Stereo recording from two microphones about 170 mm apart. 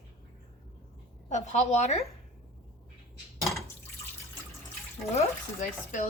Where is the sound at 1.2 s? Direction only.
45° left (ahead or behind).